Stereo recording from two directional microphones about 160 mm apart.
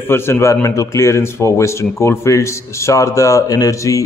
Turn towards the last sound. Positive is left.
turn(degrees=20)  # may be behind; listen again after turning